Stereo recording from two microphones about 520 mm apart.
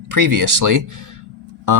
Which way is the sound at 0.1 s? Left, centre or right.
Right.